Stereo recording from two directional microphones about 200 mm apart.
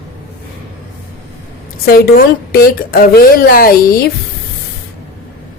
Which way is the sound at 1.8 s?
50° left (ahead or behind).